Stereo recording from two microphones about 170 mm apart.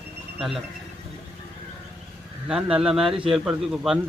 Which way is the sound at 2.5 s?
5° right (ahead or behind).